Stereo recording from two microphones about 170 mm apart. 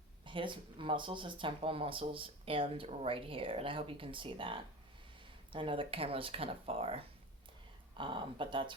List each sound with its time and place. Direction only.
0.3 s speech: 30° right (ahead or behind)